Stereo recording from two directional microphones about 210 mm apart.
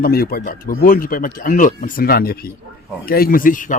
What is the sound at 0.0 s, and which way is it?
Speech, 45° left (ahead or behind).